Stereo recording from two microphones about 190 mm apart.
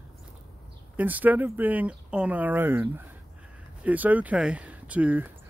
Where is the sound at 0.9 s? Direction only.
10° right (ahead or behind).